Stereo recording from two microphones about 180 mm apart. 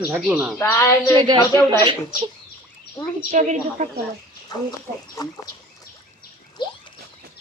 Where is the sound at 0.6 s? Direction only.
15° left (ahead or behind).